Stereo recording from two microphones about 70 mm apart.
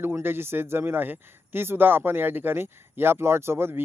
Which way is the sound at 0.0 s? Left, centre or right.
Right.